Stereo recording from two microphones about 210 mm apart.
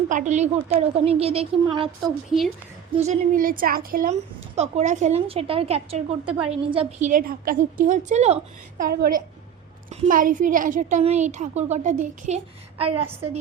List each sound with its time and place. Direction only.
0.1 s a woman's voice: 35° right (ahead or behind)
2.9 s a woman's voice: 30° right (ahead or behind)
7.1 s a woman's voice: 45° right (ahead or behind)
8.8 s a woman's voice: 45° right (ahead or behind); by 13.1 s 25° right (ahead or behind)